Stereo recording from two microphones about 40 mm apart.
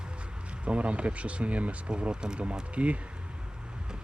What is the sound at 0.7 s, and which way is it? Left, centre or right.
Speech, right.